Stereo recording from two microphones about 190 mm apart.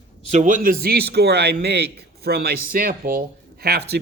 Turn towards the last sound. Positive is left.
turn(degrees=-55)  # may be behind; listen again after turning